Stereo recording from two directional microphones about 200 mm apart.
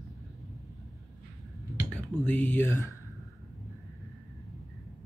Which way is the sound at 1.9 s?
10° left (ahead or behind).